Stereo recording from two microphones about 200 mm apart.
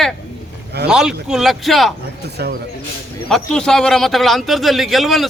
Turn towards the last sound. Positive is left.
turn(degrees=0)  # may be behind; listen again after turning